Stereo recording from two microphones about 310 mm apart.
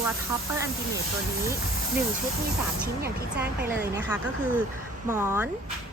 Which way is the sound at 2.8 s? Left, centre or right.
Right.